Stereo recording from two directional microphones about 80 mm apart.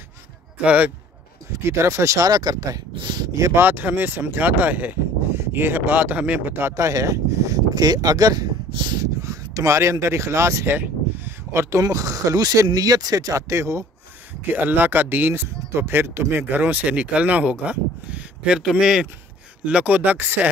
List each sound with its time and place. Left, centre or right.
0.7 s speech: centre
1.5 s speech: right
2.9 s speech: right
3.3 s speech: right
3.6 s speech: right
6.7 s speech: right
8.7 s a sound: right
9.0 s a sound: right
11.8 s speech: right
14.5 s speech: right